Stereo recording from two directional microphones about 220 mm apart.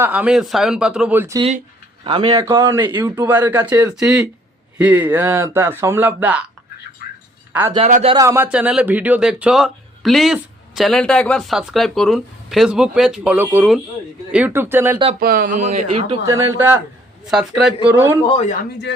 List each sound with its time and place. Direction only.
0.0 s a man's voice: 5° right (ahead or behind)
7.9 s speech: 35° right (ahead or behind)
8.1 s a man's voice: 15° right (ahead or behind)
15.2 s speech: 45° right (ahead or behind); by 16.2 s 30° right (ahead or behind)
16.5 s a man's voice: 10° right (ahead or behind)
18.3 s speech: 30° left (ahead or behind)
18.9 s speech: 55° left (ahead or behind)